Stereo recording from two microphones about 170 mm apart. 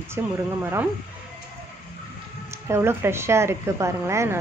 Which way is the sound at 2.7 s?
15° right (ahead or behind).